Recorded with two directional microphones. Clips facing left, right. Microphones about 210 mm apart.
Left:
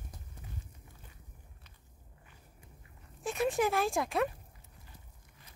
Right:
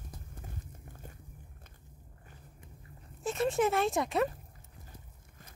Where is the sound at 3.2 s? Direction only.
Centre (ahead or behind).